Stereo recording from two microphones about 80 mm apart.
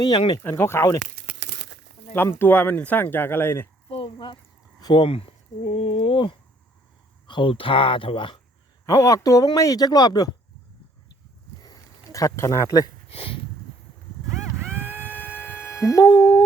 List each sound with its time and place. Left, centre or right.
0.0 s speech: left
0.5 s speech: left
2.2 s speech: left
4.0 s a sound: left
4.8 s speech: left
6.0 s speech: left
8.9 s speech: left
11.6 s a sound: left
14.8 s music: right
15.7 s speech: left
16.0 s speech: left